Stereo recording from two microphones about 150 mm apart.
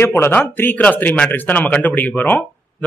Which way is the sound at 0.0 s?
15° left (ahead or behind).